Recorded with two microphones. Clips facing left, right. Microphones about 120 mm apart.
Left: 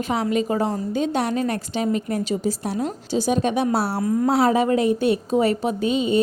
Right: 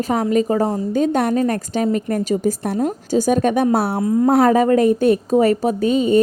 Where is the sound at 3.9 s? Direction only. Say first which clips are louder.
Right 4 dB; 25° right (ahead or behind).